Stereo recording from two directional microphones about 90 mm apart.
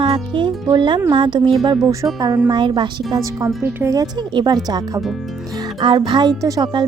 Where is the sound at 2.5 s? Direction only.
60° right (ahead or behind).